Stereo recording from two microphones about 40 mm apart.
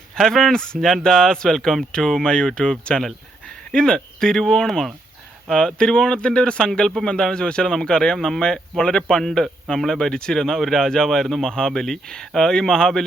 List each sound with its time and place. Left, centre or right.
0.2 s a man's voice: centre
0.8 s a man's voice: centre
2.2 s a man's voice: centre